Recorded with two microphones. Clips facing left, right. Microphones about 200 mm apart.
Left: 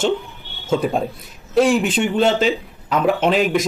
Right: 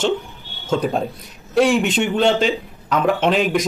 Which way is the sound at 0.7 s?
5° left (ahead or behind).